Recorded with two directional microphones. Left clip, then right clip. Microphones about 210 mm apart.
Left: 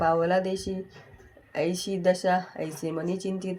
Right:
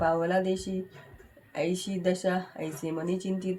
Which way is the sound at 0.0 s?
40° left (ahead or behind).